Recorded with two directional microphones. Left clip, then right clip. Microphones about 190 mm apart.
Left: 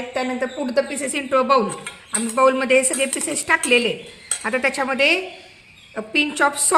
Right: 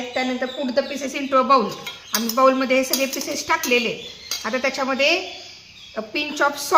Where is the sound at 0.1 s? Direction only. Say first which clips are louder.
Even; 60° left (ahead or behind).